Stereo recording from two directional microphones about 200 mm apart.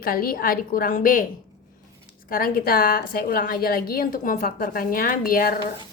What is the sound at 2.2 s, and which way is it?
Speech, 45° left (ahead or behind).